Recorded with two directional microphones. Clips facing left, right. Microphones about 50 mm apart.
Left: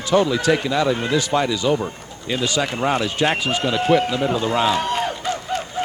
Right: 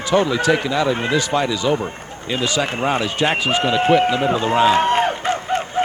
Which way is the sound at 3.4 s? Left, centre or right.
Right.